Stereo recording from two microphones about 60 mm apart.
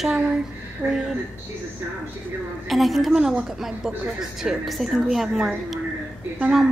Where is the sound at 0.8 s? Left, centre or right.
Centre.